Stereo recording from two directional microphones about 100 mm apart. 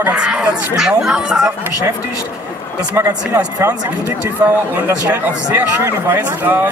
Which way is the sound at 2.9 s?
25° right (ahead or behind).